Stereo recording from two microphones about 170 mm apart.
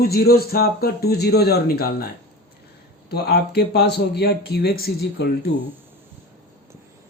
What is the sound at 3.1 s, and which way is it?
Speech, 70° left (ahead or behind).